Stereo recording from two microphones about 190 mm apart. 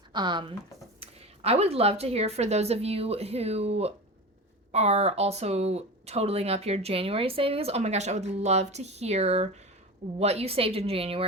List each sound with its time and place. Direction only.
0.1 s speech: 25° right (ahead or behind)